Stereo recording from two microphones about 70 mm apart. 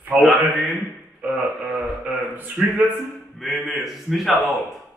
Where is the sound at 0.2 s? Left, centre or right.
Centre.